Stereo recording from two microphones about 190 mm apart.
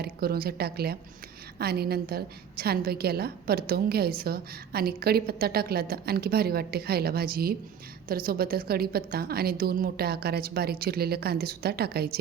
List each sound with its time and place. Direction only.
0.0 s a woman's voice: 55° right (ahead or behind)